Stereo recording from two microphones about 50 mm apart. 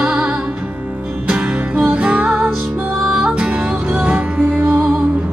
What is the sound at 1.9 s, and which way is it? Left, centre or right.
Music, right.